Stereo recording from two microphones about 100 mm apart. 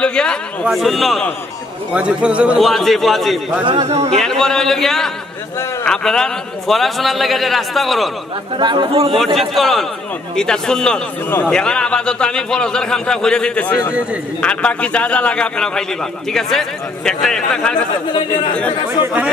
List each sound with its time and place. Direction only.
0.0 s a man's voice: 10° left (ahead or behind)
2.0 s a man's voice: 10° right (ahead or behind)
2.6 s a man's voice: centre (ahead or behind)
3.6 s a man's voice: 60° right (ahead or behind); by 4.2 s 75° right (ahead or behind)
4.2 s a man's voice: 5° left (ahead or behind)
8.5 s speech: 50° right (ahead or behind)
9.1 s a man's voice: centre (ahead or behind)
11.2 s a man's voice: 20° left (ahead or behind)
11.5 s a man's voice: 10° left (ahead or behind)
18.1 s a man's voice: 55° left (ahead or behind)